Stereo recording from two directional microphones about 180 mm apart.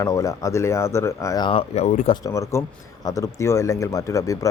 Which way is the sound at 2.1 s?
15° left (ahead or behind).